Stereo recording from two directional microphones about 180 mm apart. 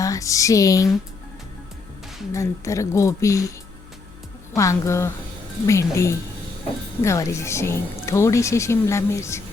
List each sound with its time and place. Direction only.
0.0 s speech: 20° left (ahead or behind)
2.3 s speech: 15° left (ahead or behind)
4.5 s speech: 15° left (ahead or behind)